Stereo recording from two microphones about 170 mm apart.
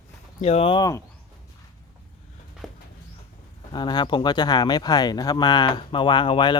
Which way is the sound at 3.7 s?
25° left (ahead or behind).